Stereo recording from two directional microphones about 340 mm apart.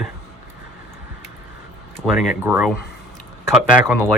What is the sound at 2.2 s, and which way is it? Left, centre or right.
Speech, centre.